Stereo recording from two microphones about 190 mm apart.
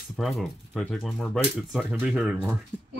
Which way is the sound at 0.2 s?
Centre (ahead or behind).